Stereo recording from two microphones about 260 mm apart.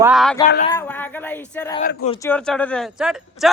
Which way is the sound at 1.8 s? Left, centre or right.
Left.